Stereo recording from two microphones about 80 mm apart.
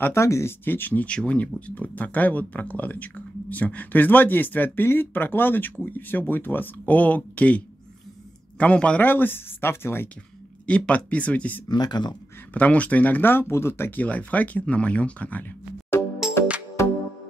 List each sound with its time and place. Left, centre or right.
0.0 s speech: left
10.7 s speech: centre
11.7 s speech: left
12.5 s speech: centre
15.9 s music: left